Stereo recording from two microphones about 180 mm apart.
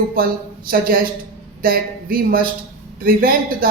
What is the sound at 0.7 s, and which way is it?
A woman's voice, 55° right (ahead or behind).